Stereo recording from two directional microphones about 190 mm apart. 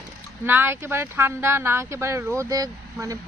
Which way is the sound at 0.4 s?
10° right (ahead or behind).